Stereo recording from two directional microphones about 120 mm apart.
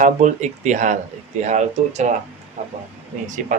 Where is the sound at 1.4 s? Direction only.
75° right (ahead or behind).